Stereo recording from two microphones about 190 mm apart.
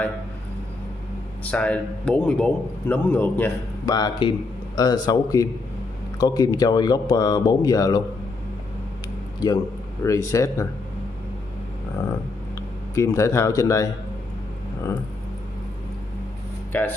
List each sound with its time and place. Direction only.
1.4 s a man's voice: 5° left (ahead or behind)
3.9 s speech: 20° left (ahead or behind)
10.0 s a man's voice: 15° left (ahead or behind)
12.9 s a man's voice: 15° left (ahead or behind)
16.7 s a man's voice: 10° left (ahead or behind)